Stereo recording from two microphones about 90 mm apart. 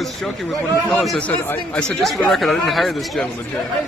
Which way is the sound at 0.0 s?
Centre (ahead or behind).